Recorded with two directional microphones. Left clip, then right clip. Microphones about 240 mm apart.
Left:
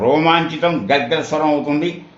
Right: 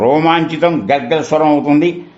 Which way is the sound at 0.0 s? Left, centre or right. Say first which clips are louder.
Right 3 dB; right.